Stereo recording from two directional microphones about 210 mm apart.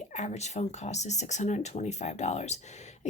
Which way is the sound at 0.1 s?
30° left (ahead or behind).